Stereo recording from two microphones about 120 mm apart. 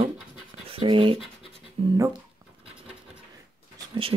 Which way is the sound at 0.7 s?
50° right (ahead or behind).